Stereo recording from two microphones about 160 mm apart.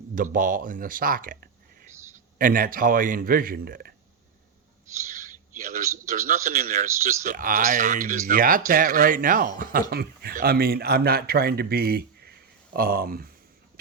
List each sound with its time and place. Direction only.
0.2 s speech: 60° right (ahead or behind)
5.2 s a man's voice: 55° right (ahead or behind)
6.7 s speech: 50° right (ahead or behind)
9.9 s speech: 75° right (ahead or behind)